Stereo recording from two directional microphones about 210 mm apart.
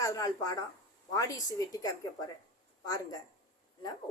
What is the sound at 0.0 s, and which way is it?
A woman's voice, 15° left (ahead or behind).